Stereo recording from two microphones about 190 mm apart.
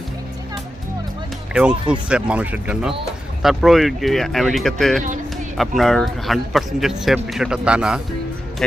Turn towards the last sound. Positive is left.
turn(degrees=-5)  # may be behind; listen again after turning